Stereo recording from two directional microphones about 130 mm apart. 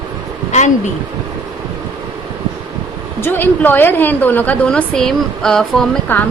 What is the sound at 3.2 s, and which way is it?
A woman's voice, 15° left (ahead or behind).